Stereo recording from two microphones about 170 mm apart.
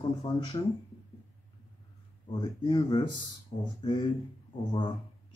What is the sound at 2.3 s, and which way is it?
Speech, 25° left (ahead or behind).